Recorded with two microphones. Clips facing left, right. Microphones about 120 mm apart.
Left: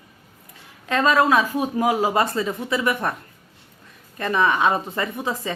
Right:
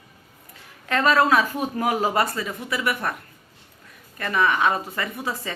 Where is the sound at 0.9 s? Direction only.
15° left (ahead or behind).